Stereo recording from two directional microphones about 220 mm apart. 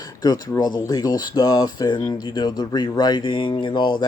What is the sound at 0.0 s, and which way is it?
Speech, 15° left (ahead or behind).